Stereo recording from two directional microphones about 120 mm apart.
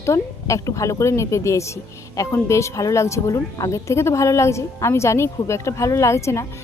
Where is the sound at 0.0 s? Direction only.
25° left (ahead or behind).